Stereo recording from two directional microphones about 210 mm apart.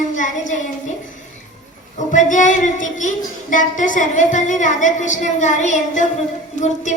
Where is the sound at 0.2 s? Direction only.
35° left (ahead or behind).